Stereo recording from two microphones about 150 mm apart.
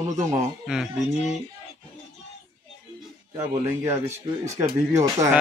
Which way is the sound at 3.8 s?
20° right (ahead or behind).